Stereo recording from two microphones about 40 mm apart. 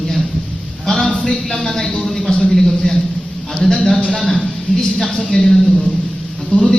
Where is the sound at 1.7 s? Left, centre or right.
Centre.